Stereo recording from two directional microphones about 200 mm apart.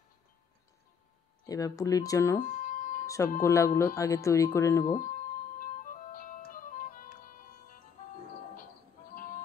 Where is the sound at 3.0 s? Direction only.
15° left (ahead or behind).